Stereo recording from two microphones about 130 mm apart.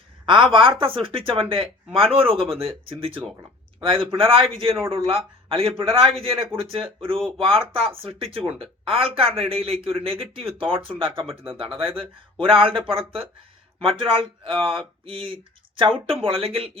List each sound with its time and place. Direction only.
0.3 s speech: 40° right (ahead or behind)